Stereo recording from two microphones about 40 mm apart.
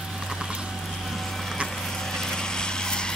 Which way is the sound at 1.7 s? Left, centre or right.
Centre.